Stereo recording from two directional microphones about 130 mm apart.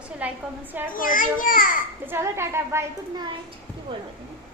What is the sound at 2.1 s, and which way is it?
Speech, 20° right (ahead or behind).